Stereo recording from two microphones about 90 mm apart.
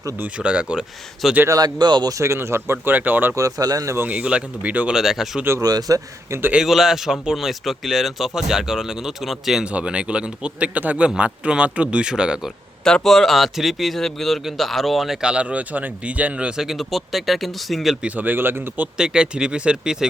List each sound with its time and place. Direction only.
0.2 s speech: 10° right (ahead or behind)
1.5 s speech: 45° right (ahead or behind)
2.1 s speech: 30° right (ahead or behind)
3.3 s speech: 40° right (ahead or behind)
3.8 s speech: 25° right (ahead or behind)
4.1 s speech: 15° right (ahead or behind)
4.9 s a man's voice: 5° right (ahead or behind)
5.6 s speech: 45° right (ahead or behind)
6.5 s a man's voice: 5° right (ahead or behind)
12.8 s a man's voice: 5° left (ahead or behind)
18.0 s speech: 20° right (ahead or behind)
18.9 s speech: 10° right (ahead or behind)